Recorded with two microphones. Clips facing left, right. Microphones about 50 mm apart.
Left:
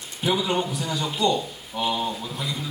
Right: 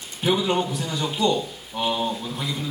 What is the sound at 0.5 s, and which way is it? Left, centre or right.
A man's voice, centre.